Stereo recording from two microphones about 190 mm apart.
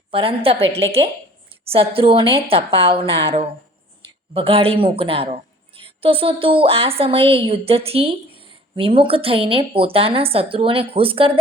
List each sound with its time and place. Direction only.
0.1 s a woman's voice: 30° right (ahead or behind)